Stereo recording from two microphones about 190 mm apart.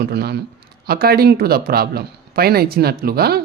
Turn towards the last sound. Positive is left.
turn(degrees=-55)  # may be behind; listen again after turning